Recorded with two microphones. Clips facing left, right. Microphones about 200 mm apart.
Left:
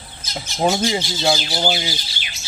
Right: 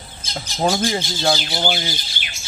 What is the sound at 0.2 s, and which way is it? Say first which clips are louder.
Speech: even; 30° right (ahead or behind).